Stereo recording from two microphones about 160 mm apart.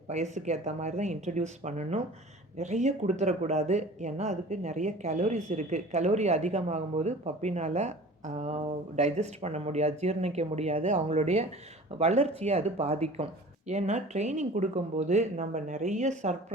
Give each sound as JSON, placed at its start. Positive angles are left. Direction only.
{"t": 0.1, "sound": "speech", "side_deg": -45}